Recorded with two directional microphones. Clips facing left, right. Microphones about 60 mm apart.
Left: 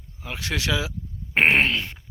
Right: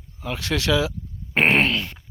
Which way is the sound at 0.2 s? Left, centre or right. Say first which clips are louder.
Right 3 dB; centre.